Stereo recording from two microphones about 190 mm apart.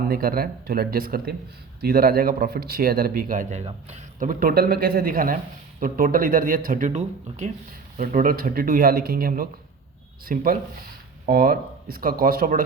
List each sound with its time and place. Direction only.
0.1 s speech: 50° right (ahead or behind)